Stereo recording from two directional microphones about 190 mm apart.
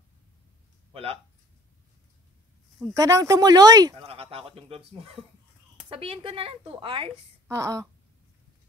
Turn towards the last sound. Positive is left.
turn(degrees=-15)  # may be behind; listen again after turning